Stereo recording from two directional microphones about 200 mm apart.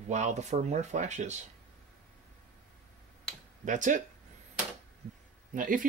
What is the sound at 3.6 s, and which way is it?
Speech, 40° right (ahead or behind).